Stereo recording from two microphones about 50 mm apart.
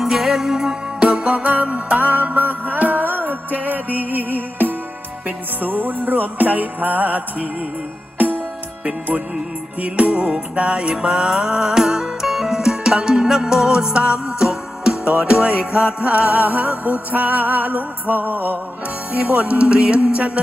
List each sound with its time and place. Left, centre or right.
0.0 s music: centre
0.9 s music: right
9.8 s speech: right
11.0 s music: centre; by 18.5 s right
19.1 s speech: right